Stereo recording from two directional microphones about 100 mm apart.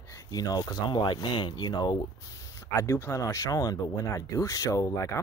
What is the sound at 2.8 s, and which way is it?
Speech, 30° left (ahead or behind).